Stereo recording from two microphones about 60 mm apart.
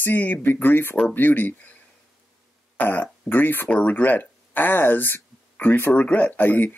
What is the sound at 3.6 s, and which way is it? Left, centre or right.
Speech, left.